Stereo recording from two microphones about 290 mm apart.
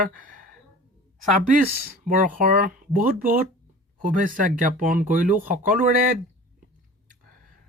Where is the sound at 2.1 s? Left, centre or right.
Right.